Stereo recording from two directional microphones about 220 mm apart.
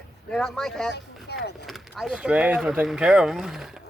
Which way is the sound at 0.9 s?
50° left (ahead or behind).